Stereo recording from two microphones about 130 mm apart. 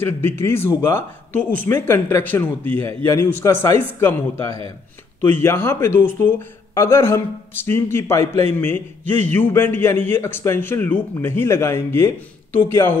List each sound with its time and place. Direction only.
0.0 s a man's voice: 15° left (ahead or behind)